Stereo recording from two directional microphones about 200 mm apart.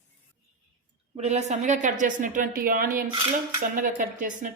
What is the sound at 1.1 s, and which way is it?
A woman's voice, 30° right (ahead or behind).